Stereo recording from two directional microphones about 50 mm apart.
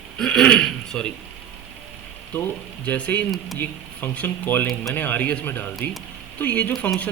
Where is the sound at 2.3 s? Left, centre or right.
Left.